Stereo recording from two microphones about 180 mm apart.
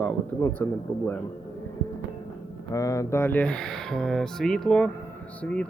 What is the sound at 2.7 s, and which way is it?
Speech, 20° left (ahead or behind).